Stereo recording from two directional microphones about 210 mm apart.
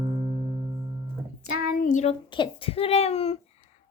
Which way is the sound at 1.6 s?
45° left (ahead or behind).